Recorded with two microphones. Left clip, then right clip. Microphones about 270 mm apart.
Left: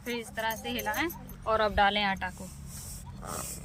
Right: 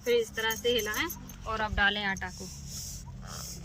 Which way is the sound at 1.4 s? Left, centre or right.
Left.